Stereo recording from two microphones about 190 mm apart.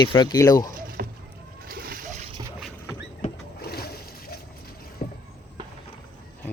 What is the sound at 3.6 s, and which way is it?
Splash, 55° left (ahead or behind).